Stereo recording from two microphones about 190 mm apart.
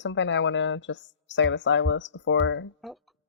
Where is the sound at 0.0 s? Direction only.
75° left (ahead or behind).